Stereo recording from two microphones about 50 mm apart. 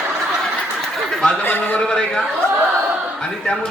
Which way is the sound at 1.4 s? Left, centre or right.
Left.